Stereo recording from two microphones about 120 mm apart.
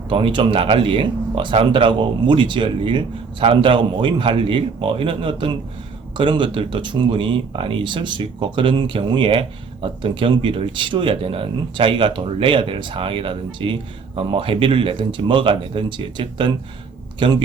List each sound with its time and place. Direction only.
0.1 s speech: 45° right (ahead or behind)